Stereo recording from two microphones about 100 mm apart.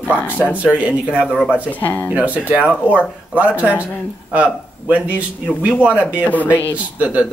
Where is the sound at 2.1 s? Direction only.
15° right (ahead or behind).